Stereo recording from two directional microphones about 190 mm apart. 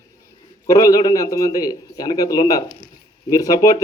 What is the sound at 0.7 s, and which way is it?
A man's voice, 20° left (ahead or behind).